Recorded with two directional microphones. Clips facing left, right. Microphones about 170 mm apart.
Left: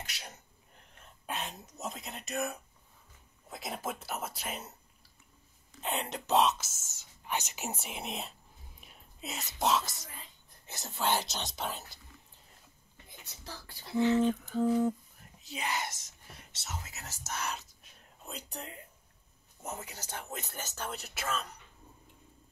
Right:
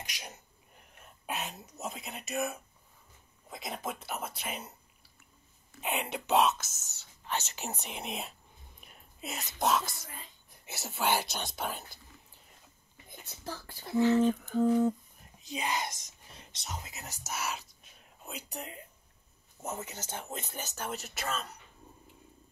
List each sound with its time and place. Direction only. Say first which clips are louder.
0.0 s sneeze: right 1 dB; 15° right (ahead or behind)
0.9 s speech: right 1 dB; 10° right (ahead or behind)
5.8 s speech: right 1 dB; 10° right (ahead or behind)
7.2 s speech: even; 10° left (ahead or behind)
13.4 s a sound: right 6 dB; 50° right (ahead or behind)
15.4 s speech: right 2 dB; 20° right (ahead or behind)
19.6 s speech: right 3 dB; 25° right (ahead or behind)
20.4 s speech: right 1 dB; 15° right (ahead or behind)